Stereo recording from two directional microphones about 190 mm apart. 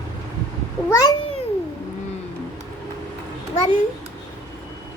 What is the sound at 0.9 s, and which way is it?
Cat, 20° left (ahead or behind).